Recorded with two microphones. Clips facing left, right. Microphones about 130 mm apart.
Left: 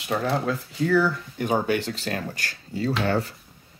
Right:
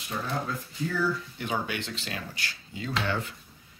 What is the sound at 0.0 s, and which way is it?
Speech, 75° left (ahead or behind).